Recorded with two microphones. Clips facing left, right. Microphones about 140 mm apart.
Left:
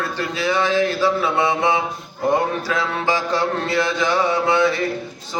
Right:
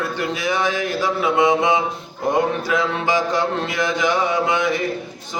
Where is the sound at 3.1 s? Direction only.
15° right (ahead or behind).